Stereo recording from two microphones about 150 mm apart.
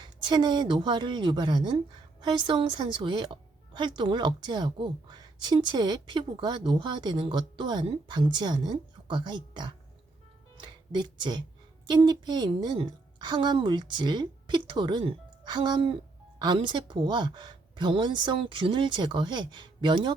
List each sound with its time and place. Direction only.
0.0 s a woman's voice: 30° right (ahead or behind)